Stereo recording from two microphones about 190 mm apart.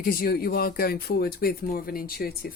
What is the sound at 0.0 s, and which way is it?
Speech, 50° left (ahead or behind).